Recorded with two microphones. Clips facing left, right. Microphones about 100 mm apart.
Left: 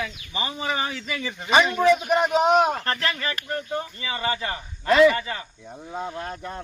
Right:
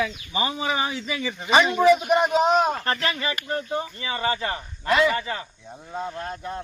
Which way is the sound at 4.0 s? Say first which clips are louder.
Right 2 dB; 30° right (ahead or behind).